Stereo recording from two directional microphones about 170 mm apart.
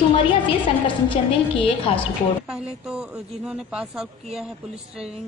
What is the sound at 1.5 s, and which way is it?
Speech, 30° left (ahead or behind).